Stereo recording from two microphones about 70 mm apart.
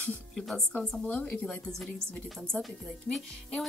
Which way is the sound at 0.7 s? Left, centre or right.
Centre.